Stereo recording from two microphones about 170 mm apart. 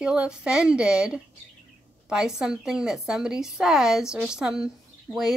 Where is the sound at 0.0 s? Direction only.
5° right (ahead or behind).